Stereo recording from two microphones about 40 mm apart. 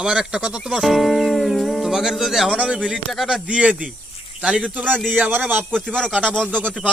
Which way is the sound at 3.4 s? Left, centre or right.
Right.